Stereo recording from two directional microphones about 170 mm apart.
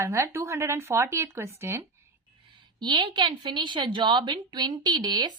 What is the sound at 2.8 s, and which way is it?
A woman's voice, 25° right (ahead or behind).